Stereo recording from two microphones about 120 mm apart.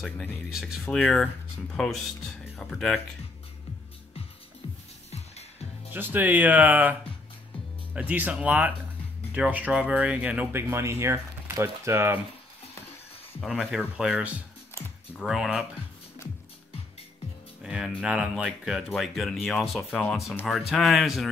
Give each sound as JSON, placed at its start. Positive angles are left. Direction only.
{"t": 0.5, "sound": "speech", "side_deg": -5}
{"t": 5.9, "sound": "speech", "side_deg": -15}
{"t": 13.6, "sound": "speech", "side_deg": -5}
{"t": 17.6, "sound": "music", "side_deg": -5}
{"t": 18.0, "sound": "speech", "side_deg": -10}